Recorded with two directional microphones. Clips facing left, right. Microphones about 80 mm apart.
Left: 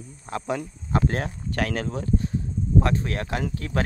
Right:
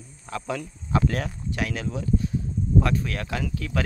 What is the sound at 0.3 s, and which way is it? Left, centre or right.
Speech, left.